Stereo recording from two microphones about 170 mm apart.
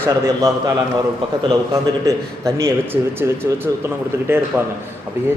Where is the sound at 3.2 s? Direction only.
15° right (ahead or behind).